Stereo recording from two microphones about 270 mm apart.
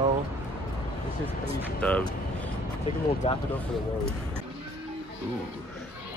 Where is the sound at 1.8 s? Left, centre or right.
Centre.